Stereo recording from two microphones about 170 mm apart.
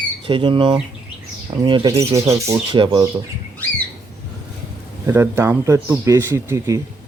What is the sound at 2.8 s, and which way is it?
Speech, 30° right (ahead or behind).